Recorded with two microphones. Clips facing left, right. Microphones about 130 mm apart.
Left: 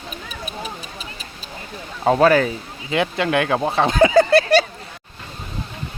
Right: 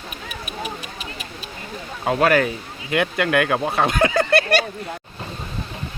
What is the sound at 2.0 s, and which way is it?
Speech, 35° left (ahead or behind).